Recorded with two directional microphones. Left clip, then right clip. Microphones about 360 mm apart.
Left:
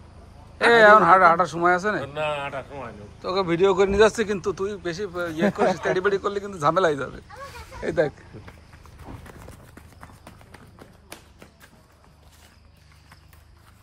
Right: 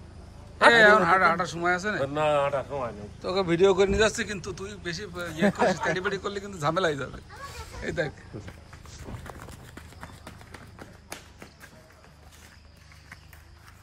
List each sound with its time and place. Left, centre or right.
0.6 s a man's voice: centre
2.1 s speech: right
3.2 s a man's voice: centre